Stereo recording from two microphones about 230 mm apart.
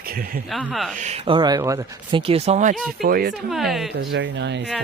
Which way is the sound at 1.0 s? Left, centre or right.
Right.